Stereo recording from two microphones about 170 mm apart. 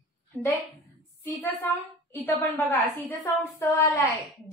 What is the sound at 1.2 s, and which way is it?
A woman's voice, 15° left (ahead or behind).